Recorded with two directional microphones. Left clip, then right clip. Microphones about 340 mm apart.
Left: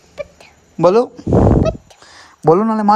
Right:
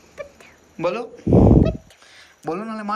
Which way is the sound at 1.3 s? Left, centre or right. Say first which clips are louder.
Left 2 dB; right.